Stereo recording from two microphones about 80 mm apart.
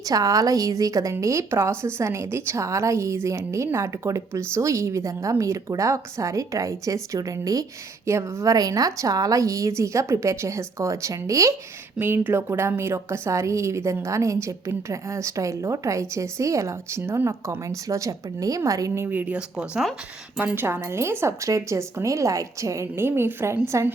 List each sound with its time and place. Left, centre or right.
0.0 s a woman's voice: right
8.0 s a woman's voice: right
11.9 s a woman's voice: right
19.0 s speech: right
20.4 s a woman's voice: right